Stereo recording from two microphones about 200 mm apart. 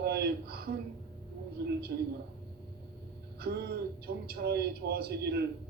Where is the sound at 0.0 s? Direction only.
55° right (ahead or behind).